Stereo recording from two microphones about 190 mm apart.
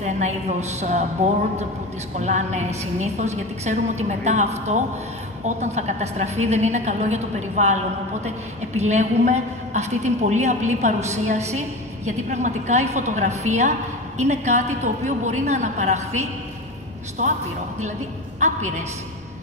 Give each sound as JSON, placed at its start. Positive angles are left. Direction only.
{"t": 0.5, "sound": "a woman's voice", "side_deg": -35}
{"t": 2.1, "sound": "a woman's voice", "side_deg": -40}
{"t": 18.4, "sound": "a woman's voice", "side_deg": -40}